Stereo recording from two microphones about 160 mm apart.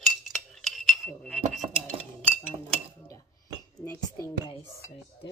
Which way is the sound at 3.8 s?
20° left (ahead or behind).